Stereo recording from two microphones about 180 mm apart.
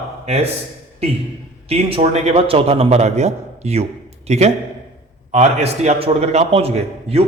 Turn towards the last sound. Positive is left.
turn(degrees=-35)  # may be behind; listen again after turning